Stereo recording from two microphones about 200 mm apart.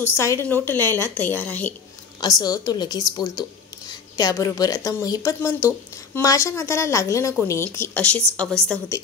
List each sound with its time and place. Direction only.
0.0 s speech: 10° left (ahead or behind)
2.1 s a woman's voice: 20° left (ahead or behind)